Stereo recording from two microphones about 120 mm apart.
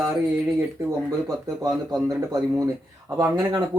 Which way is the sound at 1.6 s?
30° right (ahead or behind).